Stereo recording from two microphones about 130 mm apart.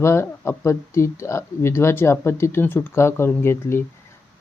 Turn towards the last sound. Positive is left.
turn(degrees=20)  # may be behind; listen again after turning